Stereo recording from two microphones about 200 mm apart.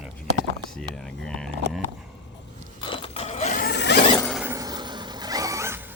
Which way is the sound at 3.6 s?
55° left (ahead or behind).